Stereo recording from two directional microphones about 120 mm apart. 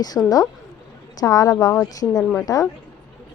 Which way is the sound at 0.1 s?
20° left (ahead or behind).